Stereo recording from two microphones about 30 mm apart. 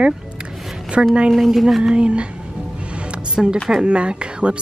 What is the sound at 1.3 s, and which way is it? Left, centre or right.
Speech, centre.